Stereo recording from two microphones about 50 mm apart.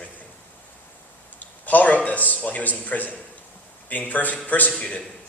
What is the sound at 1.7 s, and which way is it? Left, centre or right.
A man's voice, left.